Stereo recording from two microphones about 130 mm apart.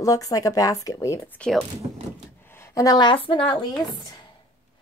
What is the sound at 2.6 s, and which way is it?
Speech, 25° left (ahead or behind).